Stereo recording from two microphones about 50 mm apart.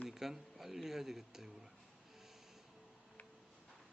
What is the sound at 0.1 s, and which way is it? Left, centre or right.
Speech, centre.